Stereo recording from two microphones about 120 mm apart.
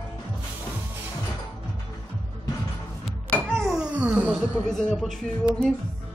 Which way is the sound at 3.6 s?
5° right (ahead or behind).